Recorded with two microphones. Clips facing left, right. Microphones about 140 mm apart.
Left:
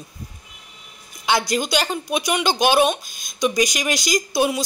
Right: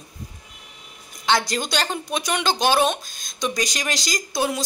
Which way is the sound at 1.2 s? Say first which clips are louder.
Left 2 dB; 10° left (ahead or behind).